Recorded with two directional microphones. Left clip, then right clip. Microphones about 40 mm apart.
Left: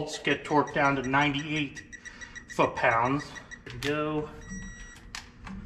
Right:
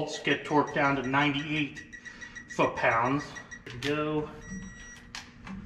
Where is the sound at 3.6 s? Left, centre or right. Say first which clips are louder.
Left 1 dB; centre.